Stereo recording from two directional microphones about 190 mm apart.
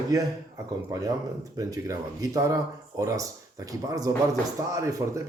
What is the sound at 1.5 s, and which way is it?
Speech, 20° right (ahead or behind).